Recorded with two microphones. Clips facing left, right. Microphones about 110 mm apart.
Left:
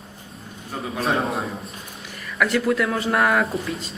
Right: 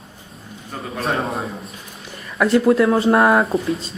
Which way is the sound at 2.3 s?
25° right (ahead or behind).